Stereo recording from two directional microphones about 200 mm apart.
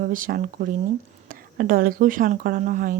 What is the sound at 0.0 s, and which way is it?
Speech, 45° right (ahead or behind).